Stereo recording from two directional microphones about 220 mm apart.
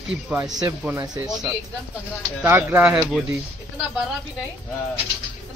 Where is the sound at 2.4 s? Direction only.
10° right (ahead or behind).